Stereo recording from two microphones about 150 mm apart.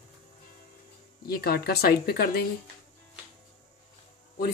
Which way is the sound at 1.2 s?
90° left.